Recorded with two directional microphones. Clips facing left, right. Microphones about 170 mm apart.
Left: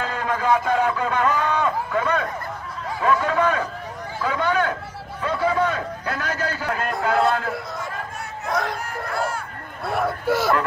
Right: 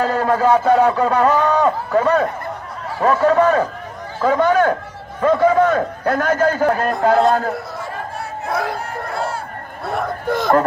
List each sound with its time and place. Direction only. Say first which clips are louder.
0.0 s a man's voice: right 8 dB; 40° right (ahead or behind)
9.1 s speech: right 1 dB; 30° right (ahead or behind)
9.9 s a man's voice: right 1 dB; 5° left (ahead or behind)